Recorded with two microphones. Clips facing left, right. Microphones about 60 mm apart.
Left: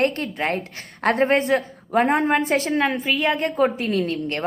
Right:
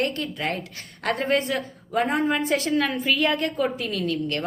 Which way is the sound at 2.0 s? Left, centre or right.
Left.